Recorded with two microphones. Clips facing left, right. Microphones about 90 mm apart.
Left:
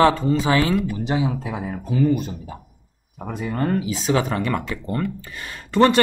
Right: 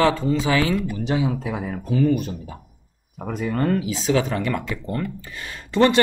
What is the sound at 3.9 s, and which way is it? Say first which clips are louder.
Speech: even; 45° left (ahead or behind).